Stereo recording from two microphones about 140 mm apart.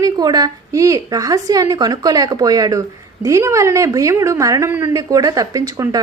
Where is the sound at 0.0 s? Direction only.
25° right (ahead or behind).